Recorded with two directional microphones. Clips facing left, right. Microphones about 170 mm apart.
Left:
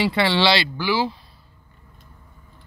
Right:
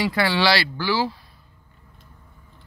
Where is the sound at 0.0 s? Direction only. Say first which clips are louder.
Left 2 dB; 25° left (ahead or behind).